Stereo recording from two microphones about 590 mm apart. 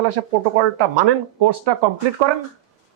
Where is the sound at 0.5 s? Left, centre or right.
Right.